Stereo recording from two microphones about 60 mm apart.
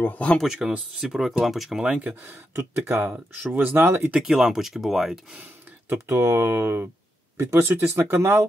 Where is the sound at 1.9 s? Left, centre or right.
Right.